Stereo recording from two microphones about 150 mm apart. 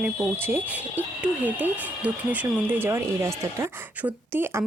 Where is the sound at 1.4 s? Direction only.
10° right (ahead or behind).